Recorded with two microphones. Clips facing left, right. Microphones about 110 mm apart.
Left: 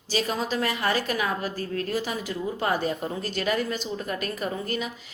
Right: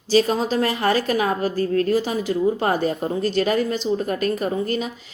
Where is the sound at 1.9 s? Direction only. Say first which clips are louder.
Right 8 dB; 30° right (ahead or behind).